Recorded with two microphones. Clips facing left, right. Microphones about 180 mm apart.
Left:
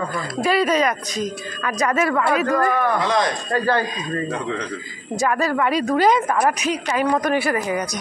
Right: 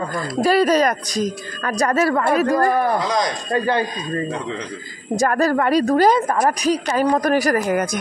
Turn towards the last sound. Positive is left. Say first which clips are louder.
# right 4 dB
turn(degrees=-55)  # may be behind; listen again after turning